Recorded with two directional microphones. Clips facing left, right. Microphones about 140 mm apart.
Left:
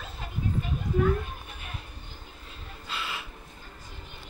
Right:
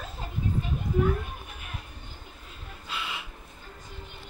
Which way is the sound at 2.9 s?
10° right (ahead or behind).